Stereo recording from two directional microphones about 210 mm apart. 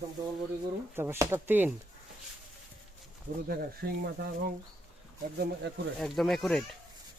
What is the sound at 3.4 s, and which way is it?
Speech, 45° right (ahead or behind).